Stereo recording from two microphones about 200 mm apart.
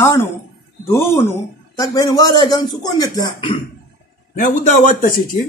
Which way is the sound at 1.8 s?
20° left (ahead or behind).